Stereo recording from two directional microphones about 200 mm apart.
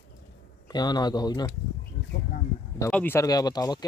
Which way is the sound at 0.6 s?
20° left (ahead or behind).